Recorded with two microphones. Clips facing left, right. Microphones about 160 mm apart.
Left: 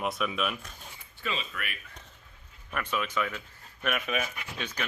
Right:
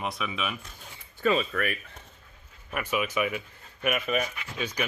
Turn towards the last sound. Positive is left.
turn(degrees=-10)  # may be behind; listen again after turning